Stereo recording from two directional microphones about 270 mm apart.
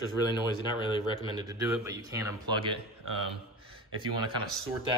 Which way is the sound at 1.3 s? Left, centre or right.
Centre.